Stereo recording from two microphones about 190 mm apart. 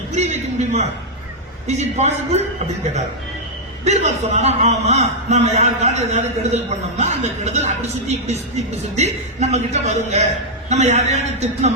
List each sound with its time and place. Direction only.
0.1 s a man's voice: 35° right (ahead or behind)
3.8 s a man's voice: 35° right (ahead or behind)